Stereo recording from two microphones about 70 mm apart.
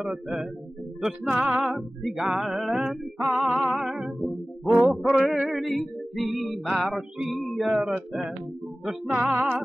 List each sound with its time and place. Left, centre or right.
0.0 s music: centre
1.3 s music: right
1.6 s music: centre
7.7 s music: centre